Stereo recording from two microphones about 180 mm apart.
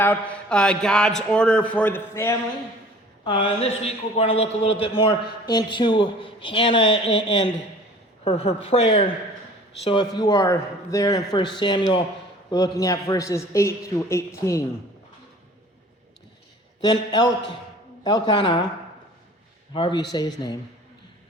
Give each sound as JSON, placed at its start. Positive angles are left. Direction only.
{"t": 0.0, "sound": "a man's voice", "side_deg": 10}
{"t": 3.2, "sound": "a man's voice", "side_deg": 30}
{"t": 16.8, "sound": "a man's voice", "side_deg": 25}
{"t": 19.7, "sound": "a man's voice", "side_deg": 25}